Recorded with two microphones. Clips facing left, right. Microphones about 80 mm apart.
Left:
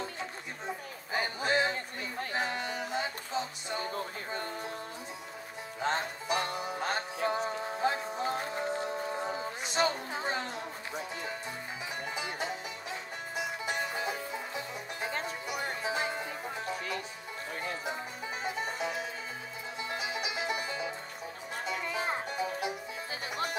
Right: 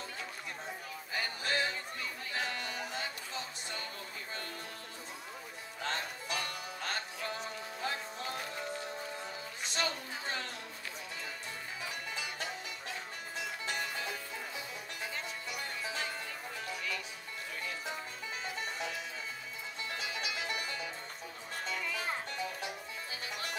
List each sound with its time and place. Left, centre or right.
1.1 s music: left
5.8 s music: left
9.7 s a sound: left
12.2 s music: left
16.7 s music: left
18.4 s music: left